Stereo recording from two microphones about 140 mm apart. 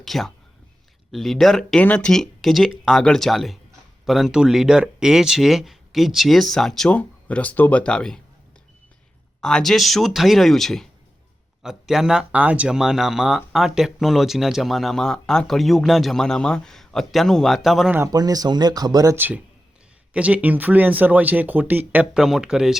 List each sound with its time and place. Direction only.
0.0 s speech: centre (ahead or behind)
9.4 s speech: 5° left (ahead or behind)
17.9 s speech: 25° right (ahead or behind); by 22.8 s 5° right (ahead or behind)